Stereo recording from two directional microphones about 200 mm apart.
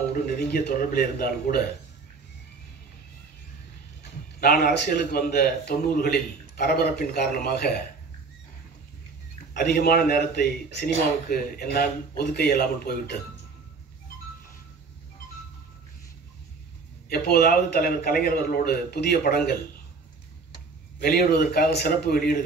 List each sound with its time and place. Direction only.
0.1 s a man's voice: 50° left (ahead or behind)
4.4 s a man's voice: 50° left (ahead or behind)
9.5 s a man's voice: 50° left (ahead or behind)
17.1 s a man's voice: 50° left (ahead or behind)
21.2 s a man's voice: 50° left (ahead or behind)